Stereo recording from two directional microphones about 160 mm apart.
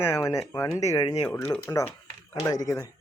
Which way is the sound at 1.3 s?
15° left (ahead or behind).